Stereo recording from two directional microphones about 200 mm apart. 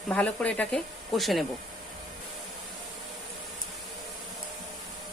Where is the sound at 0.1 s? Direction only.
5° left (ahead or behind).